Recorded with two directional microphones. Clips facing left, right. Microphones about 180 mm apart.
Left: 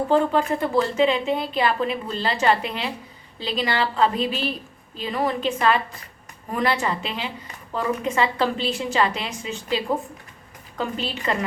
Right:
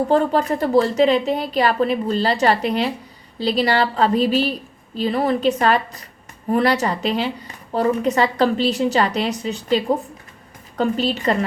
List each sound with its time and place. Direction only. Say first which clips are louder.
0.1 s speech: even; 40° right (ahead or behind)